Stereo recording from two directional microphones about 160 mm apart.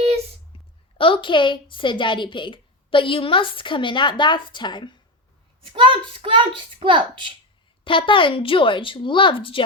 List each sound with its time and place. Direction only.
0.9 s a woman's voice: 35° left (ahead or behind)
5.7 s a child's voice: 30° right (ahead or behind)
7.9 s a woman's voice: 30° left (ahead or behind)